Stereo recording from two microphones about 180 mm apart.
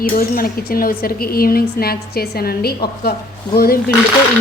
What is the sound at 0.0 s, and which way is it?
Speech, 55° left (ahead or behind).